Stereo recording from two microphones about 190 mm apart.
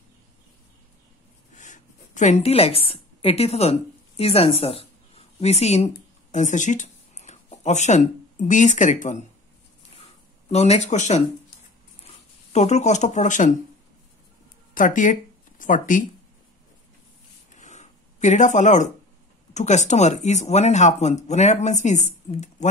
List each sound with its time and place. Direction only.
1.5 s a sound: 40° left (ahead or behind)
4.2 s speech: 30° left (ahead or behind)
10.5 s speech: 35° left (ahead or behind)
12.5 s speech: 35° left (ahead or behind)
14.7 s speech: 45° left (ahead or behind)
17.5 s a sound: 40° left (ahead or behind)
19.5 s speech: 40° left (ahead or behind)